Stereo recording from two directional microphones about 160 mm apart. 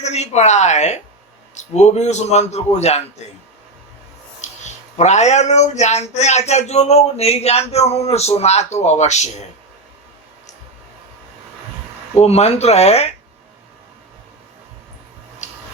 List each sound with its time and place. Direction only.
0.0 s speech: 45° left (ahead or behind)
4.4 s a sound: 45° left (ahead or behind)
4.9 s speech: 45° left (ahead or behind)
12.1 s speech: 40° left (ahead or behind)